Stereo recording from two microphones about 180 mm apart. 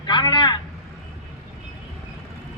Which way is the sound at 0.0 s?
25° left (ahead or behind).